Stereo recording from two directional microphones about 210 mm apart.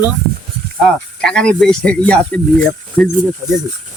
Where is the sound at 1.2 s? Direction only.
5° left (ahead or behind).